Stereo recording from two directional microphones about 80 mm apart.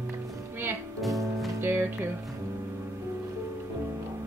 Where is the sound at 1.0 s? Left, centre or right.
Centre.